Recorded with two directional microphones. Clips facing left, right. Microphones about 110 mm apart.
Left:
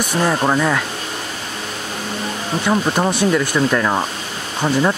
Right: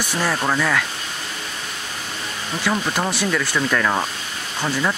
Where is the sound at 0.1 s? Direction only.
25° left (ahead or behind).